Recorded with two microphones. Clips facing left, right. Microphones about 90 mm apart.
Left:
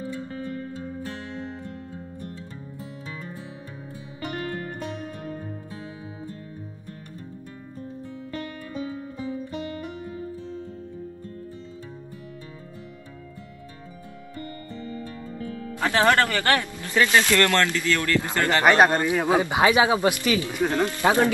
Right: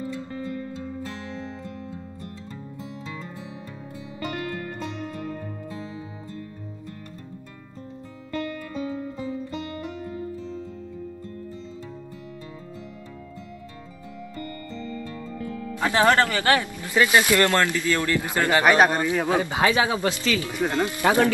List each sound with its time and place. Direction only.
15.8 s speech: 20° right (ahead or behind)
19.0 s speech: 20° left (ahead or behind)
20.6 s speech: 15° right (ahead or behind)